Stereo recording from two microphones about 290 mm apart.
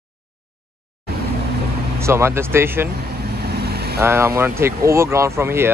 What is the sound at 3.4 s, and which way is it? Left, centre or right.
Vehicle, right.